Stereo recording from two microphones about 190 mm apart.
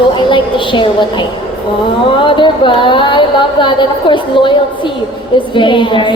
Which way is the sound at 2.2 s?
25° left (ahead or behind).